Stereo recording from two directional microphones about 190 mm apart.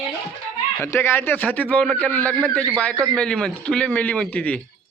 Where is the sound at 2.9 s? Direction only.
15° right (ahead or behind).